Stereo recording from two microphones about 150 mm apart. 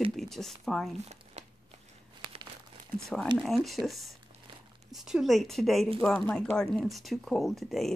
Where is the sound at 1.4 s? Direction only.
50° right (ahead or behind).